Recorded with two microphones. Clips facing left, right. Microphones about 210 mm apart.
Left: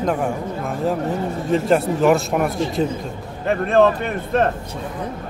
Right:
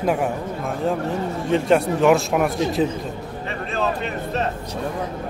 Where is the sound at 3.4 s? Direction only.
55° left (ahead or behind).